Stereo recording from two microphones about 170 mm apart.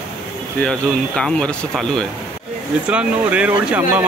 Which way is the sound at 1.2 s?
5° left (ahead or behind).